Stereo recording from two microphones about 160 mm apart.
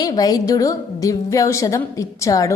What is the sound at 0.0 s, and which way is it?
A woman's voice, 25° left (ahead or behind).